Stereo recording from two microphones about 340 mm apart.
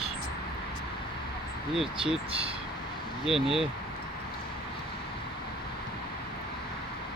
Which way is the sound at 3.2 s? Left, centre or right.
Centre.